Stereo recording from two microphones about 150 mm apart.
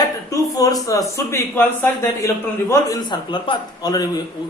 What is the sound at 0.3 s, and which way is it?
A man's voice, 25° left (ahead or behind).